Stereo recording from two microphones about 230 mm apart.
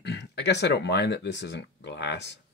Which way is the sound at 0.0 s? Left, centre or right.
Left.